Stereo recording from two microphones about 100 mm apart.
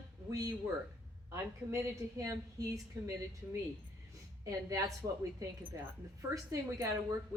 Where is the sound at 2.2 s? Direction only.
35° right (ahead or behind).